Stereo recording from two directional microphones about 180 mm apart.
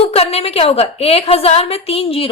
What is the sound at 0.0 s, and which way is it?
A woman's voice, 35° left (ahead or behind).